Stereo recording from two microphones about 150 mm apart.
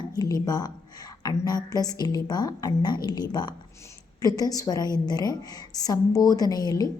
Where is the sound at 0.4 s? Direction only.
25° left (ahead or behind).